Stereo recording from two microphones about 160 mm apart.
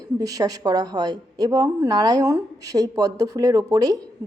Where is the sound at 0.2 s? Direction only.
20° right (ahead or behind).